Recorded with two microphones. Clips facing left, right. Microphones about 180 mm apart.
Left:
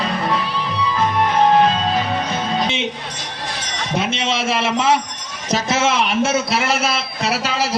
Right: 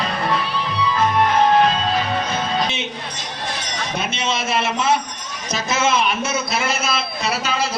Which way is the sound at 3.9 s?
90° left.